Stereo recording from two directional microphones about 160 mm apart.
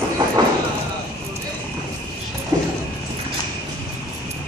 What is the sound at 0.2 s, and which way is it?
Vehicle, 30° right (ahead or behind).